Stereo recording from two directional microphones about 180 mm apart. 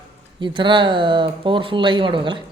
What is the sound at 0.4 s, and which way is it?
Speech, 25° right (ahead or behind).